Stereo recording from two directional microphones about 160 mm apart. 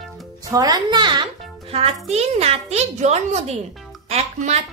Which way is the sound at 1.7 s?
40° right (ahead or behind).